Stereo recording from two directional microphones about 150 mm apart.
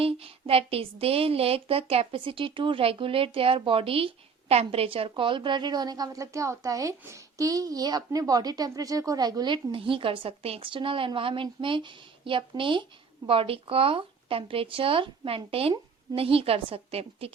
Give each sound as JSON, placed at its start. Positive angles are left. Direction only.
{"t": 0.0, "sound": "a woman's voice", "side_deg": -40}